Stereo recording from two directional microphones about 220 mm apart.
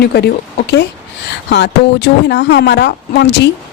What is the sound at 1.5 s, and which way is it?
A woman's voice, 50° left (ahead or behind).